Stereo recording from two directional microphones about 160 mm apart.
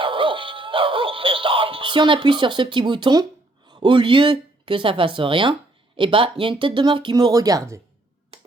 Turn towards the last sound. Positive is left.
turn(degrees=-20)  # may be behind; listen again after turning